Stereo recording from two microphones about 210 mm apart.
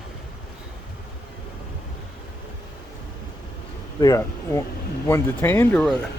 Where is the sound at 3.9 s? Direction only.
15° left (ahead or behind).